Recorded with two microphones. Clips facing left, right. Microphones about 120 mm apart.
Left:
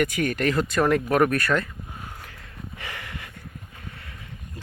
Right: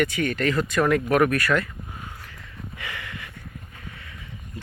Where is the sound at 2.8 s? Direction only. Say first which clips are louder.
Right 1 dB; 35° left (ahead or behind).